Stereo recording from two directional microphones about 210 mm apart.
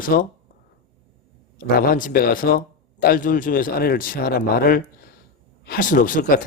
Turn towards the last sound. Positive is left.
turn(degrees=40)  # may be behind; listen again after turning